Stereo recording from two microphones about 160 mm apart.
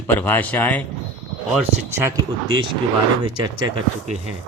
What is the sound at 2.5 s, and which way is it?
Speech, 30° right (ahead or behind).